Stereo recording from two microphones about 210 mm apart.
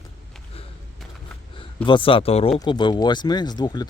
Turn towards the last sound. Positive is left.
turn(degrees=20)  # may be behind; listen again after turning